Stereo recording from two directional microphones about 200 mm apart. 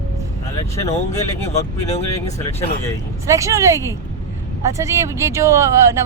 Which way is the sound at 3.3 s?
15° right (ahead or behind).